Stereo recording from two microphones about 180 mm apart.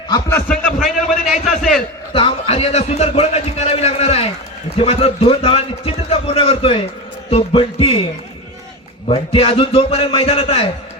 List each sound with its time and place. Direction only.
0.1 s a man's voice: 15° left (ahead or behind)
0.5 s a man's voice: centre (ahead or behind)
2.1 s a man's voice: 30° left (ahead or behind)
9.0 s a man's voice: 30° left (ahead or behind)